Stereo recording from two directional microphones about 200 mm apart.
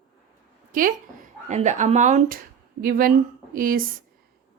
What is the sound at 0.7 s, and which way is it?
A woman's voice, 45° right (ahead or behind).